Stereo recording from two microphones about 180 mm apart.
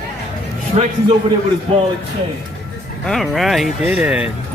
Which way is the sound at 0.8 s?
35° right (ahead or behind).